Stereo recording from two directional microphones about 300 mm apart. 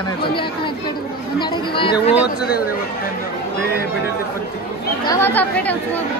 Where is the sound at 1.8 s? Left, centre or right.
Centre.